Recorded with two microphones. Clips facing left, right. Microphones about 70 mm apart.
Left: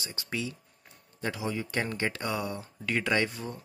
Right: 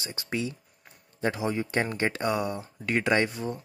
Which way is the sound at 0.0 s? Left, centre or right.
Right.